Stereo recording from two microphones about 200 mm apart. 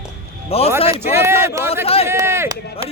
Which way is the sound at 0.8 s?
30° left (ahead or behind).